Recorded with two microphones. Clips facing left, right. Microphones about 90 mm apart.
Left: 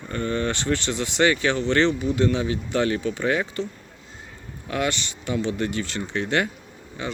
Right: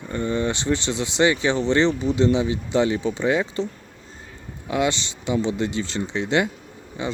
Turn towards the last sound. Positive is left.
turn(degrees=-25)  # may be behind; listen again after turning